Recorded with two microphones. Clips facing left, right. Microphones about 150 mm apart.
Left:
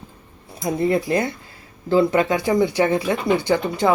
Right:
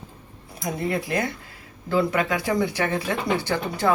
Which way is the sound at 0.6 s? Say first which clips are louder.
Left 6 dB; 25° left (ahead or behind).